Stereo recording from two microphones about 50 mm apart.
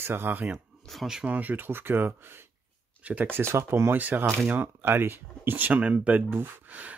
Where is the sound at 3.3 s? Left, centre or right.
Right.